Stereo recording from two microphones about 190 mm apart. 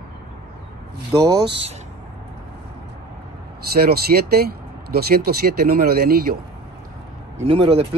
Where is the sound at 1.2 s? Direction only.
20° right (ahead or behind).